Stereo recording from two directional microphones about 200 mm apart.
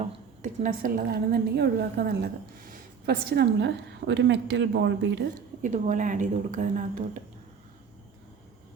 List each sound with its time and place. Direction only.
0.0 s a woman's voice: 40° right (ahead or behind); by 5.3 s 60° right (ahead or behind)
5.6 s speech: 40° right (ahead or behind)